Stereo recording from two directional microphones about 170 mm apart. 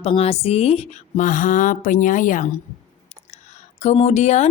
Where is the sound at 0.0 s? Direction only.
35° left (ahead or behind).